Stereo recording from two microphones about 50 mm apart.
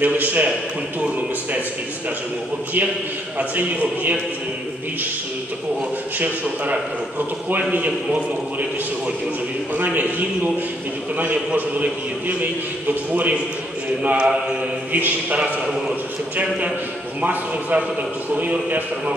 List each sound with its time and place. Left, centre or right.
0.0 s a man's voice: right
3.5 s a man's voice: right
6.1 s a man's voice: right
14.0 s a man's voice: right
14.9 s a man's voice: right